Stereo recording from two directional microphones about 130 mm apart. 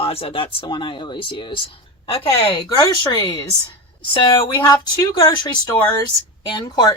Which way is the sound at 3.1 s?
30° left (ahead or behind).